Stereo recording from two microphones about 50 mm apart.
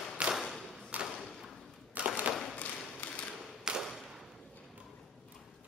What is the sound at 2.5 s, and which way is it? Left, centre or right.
Thump, left.